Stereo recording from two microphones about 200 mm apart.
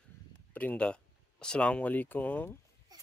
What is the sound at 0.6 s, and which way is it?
Speech, 5° left (ahead or behind).